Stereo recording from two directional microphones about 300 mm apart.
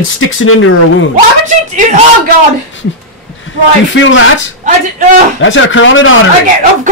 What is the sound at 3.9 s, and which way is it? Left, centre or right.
Speech, left.